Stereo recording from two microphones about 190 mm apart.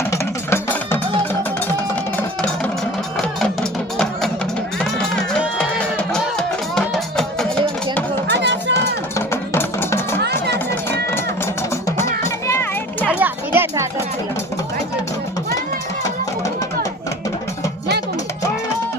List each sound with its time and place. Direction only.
0.1 s music: 10° left (ahead or behind)
3.4 s music: 5° left (ahead or behind)
8.3 s music: 65° right (ahead or behind)
9.1 s music: 15° left (ahead or behind)
10.2 s music: 60° right (ahead or behind)
11.7 s music: 15° left (ahead or behind)
12.5 s children playing: 15° left (ahead or behind)
13.1 s children playing: 10° right (ahead or behind)